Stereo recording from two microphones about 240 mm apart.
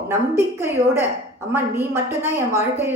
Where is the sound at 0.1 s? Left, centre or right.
Centre.